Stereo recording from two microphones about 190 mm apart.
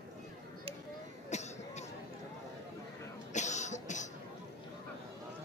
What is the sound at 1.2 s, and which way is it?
Cough, 35° left (ahead or behind).